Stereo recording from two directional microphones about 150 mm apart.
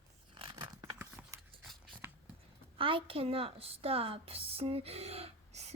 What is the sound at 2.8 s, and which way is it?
A woman's voice, 35° right (ahead or behind).